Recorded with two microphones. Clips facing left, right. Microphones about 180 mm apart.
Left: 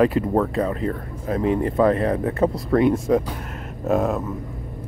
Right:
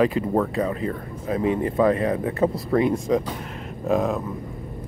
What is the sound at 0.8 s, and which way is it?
Speech, 40° left (ahead or behind).